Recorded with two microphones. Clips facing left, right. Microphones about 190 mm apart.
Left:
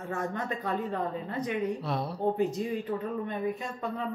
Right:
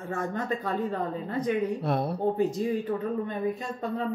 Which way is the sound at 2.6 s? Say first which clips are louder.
Right 4 dB; 35° right (ahead or behind).